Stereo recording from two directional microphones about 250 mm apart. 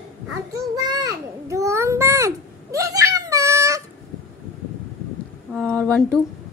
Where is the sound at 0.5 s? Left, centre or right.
Centre.